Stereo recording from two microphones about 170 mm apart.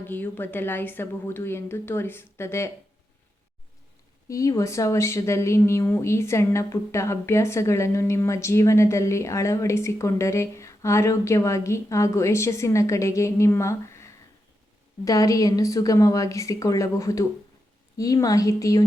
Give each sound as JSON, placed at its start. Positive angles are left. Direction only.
{"t": 0.0, "sound": "speech", "side_deg": 10}
{"t": 4.3, "sound": "a woman's voice", "side_deg": 20}